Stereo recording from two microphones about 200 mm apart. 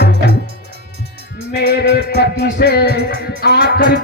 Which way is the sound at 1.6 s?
55° left (ahead or behind).